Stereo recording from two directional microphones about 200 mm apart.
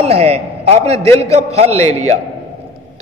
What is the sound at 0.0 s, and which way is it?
A man's voice, 30° right (ahead or behind).